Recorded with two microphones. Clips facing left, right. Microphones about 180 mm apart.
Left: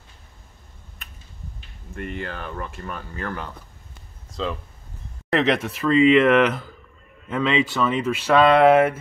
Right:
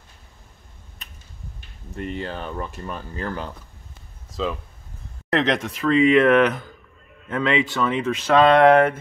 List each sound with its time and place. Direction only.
2.0 s speech: 25° right (ahead or behind)
5.3 s speech: 5° left (ahead or behind)